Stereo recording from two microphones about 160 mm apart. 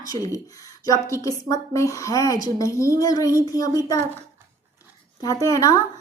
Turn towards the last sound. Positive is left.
turn(degrees=20)  # may be behind; listen again after turning